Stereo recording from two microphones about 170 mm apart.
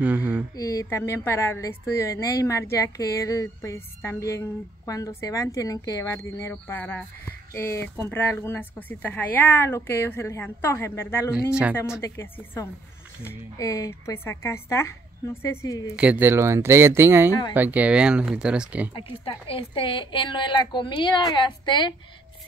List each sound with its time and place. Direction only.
0.0 s speech: 10° right (ahead or behind)
0.6 s a woman's voice: 20° left (ahead or behind)
16.0 s speech: 10° right (ahead or behind)
17.3 s a woman's voice: 25° left (ahead or behind)
17.6 s speech: 10° right (ahead or behind)
18.9 s a woman's voice: 30° left (ahead or behind)